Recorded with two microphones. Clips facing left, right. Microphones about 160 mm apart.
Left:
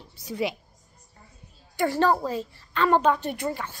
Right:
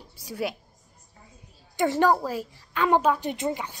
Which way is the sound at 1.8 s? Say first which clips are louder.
Right 1 dB; 15° right (ahead or behind).